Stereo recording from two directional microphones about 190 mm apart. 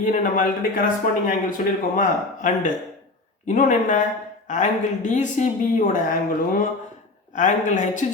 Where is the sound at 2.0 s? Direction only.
40° left (ahead or behind).